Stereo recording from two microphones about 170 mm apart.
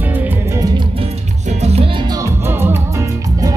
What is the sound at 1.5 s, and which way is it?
Music, 40° right (ahead or behind).